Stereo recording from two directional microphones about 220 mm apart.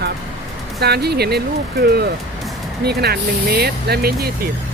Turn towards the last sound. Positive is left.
turn(degrees=-45)  # may be behind; listen again after turning